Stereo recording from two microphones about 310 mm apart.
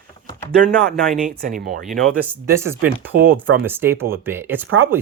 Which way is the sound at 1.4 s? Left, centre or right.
Right.